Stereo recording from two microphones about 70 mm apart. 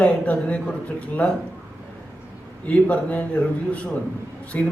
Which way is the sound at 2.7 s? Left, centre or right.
Centre.